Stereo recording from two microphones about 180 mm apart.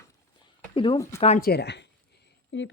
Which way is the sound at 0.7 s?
30° left (ahead or behind).